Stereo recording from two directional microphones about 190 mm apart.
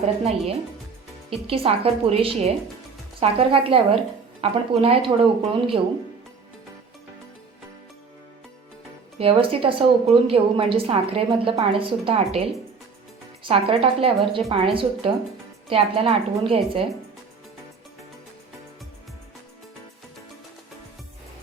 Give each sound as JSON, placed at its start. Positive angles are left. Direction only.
{"t": 0.0, "sound": "a woman's voice", "side_deg": -35}
{"t": 9.1, "sound": "a woman's voice", "side_deg": -30}
{"t": 13.4, "sound": "a woman's voice", "side_deg": -30}